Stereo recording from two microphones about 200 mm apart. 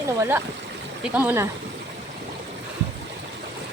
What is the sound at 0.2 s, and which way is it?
Speech, 10° right (ahead or behind).